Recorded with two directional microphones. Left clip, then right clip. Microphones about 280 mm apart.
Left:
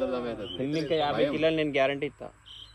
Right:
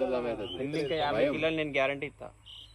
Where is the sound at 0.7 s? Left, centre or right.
Left.